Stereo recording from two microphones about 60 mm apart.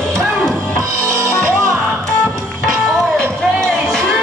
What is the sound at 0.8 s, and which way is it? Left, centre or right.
Music, right.